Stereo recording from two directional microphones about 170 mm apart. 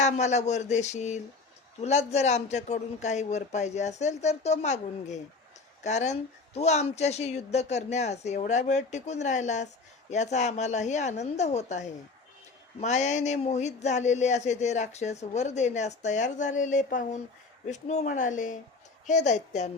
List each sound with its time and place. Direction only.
0.0 s a man's voice: 45° left (ahead or behind)